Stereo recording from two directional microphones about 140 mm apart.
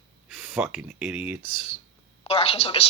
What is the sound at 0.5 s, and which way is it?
Speech, 5° right (ahead or behind).